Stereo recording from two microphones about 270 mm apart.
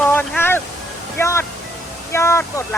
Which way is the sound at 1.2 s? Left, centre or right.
Centre.